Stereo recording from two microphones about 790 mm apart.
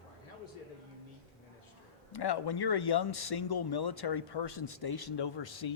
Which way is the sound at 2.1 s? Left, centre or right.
Left.